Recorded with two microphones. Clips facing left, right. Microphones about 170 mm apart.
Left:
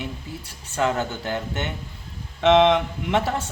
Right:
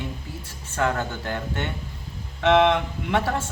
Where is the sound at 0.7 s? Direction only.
20° left (ahead or behind).